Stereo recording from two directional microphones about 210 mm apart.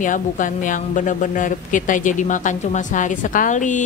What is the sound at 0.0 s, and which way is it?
Speech, 40° left (ahead or behind).